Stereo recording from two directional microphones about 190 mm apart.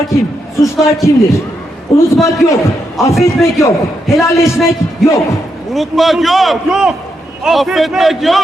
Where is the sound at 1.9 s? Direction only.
30° left (ahead or behind).